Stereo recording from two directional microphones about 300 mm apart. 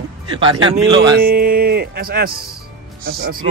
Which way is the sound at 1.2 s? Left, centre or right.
Right.